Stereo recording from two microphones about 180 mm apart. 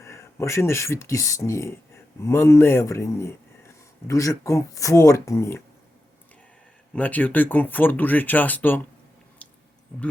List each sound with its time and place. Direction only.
0.0 s speech: 15° left (ahead or behind)
6.9 s speech: 10° left (ahead or behind)
9.4 s squish: 5° left (ahead or behind)